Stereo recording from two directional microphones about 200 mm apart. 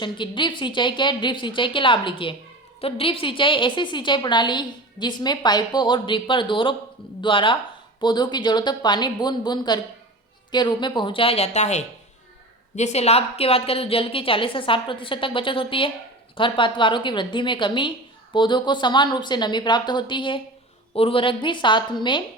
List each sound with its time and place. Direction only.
0.0 s a woman's voice: 25° left (ahead or behind)